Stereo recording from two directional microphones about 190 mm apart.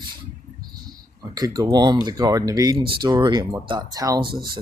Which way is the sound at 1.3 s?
20° right (ahead or behind).